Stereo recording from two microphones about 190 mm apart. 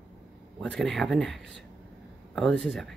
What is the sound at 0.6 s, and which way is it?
Speech, 5° left (ahead or behind).